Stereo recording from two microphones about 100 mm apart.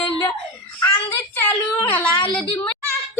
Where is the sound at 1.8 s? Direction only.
20° left (ahead or behind).